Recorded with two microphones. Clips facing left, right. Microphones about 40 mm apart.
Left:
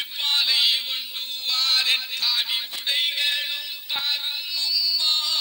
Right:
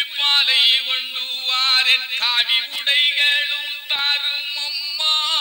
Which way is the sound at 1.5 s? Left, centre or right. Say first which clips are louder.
Right 5 dB; right.